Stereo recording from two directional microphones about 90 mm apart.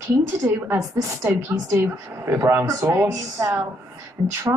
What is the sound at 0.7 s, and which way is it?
Speech, 40° right (ahead or behind).